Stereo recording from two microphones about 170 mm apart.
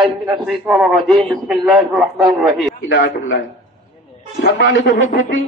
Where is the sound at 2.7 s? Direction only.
90° left.